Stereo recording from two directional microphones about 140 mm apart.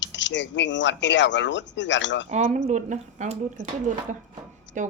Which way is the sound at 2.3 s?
55° right (ahead or behind).